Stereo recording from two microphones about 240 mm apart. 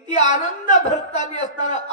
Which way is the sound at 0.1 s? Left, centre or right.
Left.